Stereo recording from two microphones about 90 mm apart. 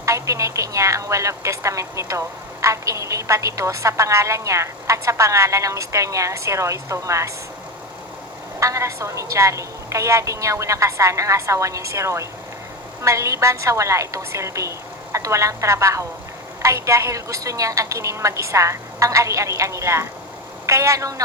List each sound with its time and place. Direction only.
0.0 s a woman's voice: 35° right (ahead or behind)
8.5 s a woman's voice: 35° right (ahead or behind)